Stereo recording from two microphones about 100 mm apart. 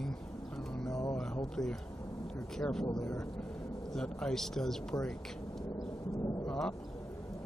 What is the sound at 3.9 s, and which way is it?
Speech, 5° left (ahead or behind).